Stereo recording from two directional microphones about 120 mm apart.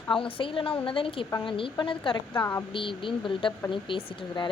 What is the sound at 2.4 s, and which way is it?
Speech, 20° left (ahead or behind).